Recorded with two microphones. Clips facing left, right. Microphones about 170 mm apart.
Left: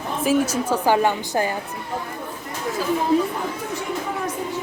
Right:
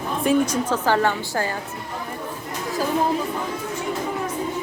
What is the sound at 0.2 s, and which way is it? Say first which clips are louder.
A woman's voice: even; 5° left (ahead or behind).